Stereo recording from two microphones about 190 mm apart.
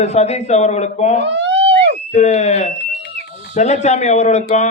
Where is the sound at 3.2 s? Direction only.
60° left (ahead or behind).